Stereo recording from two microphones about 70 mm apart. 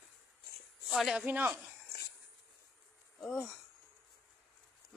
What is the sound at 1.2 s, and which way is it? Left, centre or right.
Speech, right.